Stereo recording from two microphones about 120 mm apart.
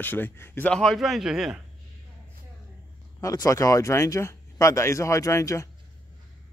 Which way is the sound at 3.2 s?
30° left (ahead or behind).